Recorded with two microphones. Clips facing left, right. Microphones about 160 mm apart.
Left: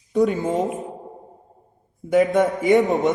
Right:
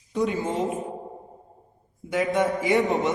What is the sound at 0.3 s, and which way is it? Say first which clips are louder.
Speech: left 4 dB; 45° left (ahead or behind).